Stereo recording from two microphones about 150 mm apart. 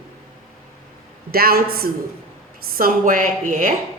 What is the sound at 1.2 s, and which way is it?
Speech, 90° right.